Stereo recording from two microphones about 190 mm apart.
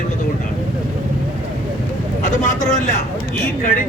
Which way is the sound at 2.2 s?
40° left (ahead or behind).